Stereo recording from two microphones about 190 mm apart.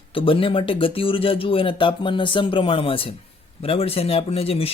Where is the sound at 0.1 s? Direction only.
30° left (ahead or behind).